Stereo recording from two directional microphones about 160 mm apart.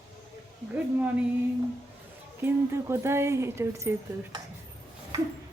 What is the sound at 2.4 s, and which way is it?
Speech, 15° right (ahead or behind).